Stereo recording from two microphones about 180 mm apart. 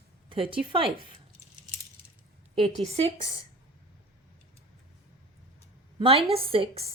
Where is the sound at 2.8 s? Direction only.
35° right (ahead or behind).